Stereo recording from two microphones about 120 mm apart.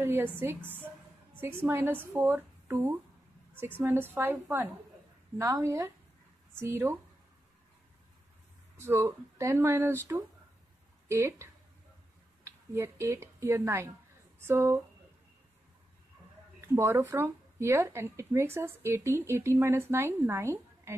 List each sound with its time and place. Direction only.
0.0 s speech: 20° right (ahead or behind)
8.7 s speech: 20° right (ahead or behind)
11.1 s speech: 25° right (ahead or behind)
12.4 s speech: 20° right (ahead or behind)
16.6 s speech: 20° right (ahead or behind)